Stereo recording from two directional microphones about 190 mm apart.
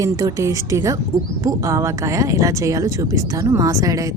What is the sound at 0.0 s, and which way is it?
Speech, 20° right (ahead or behind).